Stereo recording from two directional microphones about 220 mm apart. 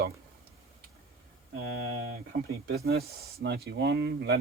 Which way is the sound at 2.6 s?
45° right (ahead or behind).